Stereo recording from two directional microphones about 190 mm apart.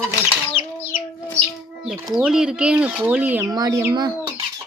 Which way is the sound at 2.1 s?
5° right (ahead or behind).